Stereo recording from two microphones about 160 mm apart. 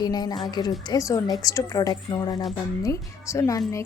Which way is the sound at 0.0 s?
25° left (ahead or behind).